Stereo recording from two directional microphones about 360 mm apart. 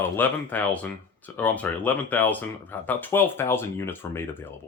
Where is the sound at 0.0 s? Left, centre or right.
Centre.